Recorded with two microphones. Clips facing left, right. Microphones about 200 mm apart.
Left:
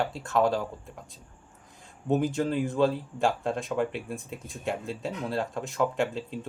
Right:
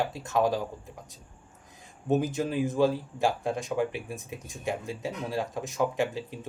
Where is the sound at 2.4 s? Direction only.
15° right (ahead or behind).